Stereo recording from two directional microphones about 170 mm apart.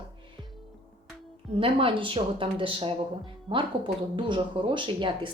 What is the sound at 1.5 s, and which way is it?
A woman's voice, 30° right (ahead or behind).